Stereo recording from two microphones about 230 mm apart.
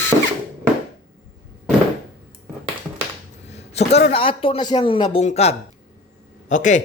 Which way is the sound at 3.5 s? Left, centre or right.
Left.